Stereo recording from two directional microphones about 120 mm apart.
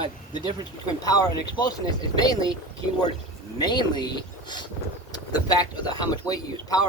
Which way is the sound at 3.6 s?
35° left (ahead or behind).